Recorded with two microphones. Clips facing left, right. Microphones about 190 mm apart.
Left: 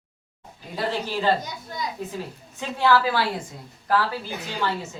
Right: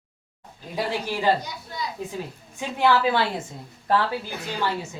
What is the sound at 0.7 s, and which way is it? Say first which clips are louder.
Speech: even; 15° right (ahead or behind).